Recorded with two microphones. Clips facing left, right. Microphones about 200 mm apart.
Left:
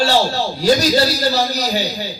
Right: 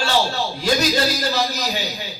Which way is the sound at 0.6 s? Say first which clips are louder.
Left 5 dB; 35° left (ahead or behind).